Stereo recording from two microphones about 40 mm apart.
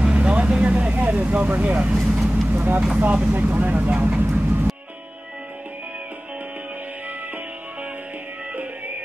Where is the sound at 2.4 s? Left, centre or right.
Right.